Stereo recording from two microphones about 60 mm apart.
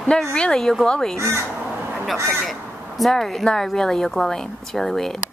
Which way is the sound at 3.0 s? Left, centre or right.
Centre.